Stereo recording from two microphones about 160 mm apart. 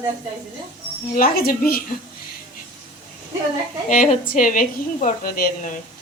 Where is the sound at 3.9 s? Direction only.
60° left (ahead or behind).